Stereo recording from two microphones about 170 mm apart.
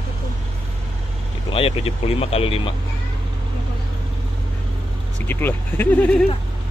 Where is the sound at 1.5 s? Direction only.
35° left (ahead or behind).